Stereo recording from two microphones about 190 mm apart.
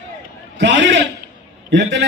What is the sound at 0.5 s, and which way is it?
A man's voice, 70° right (ahead or behind).